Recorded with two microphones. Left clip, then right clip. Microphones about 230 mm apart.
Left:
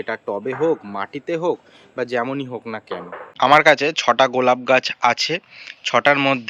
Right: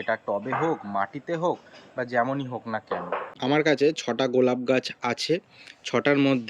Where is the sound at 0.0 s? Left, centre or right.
Centre.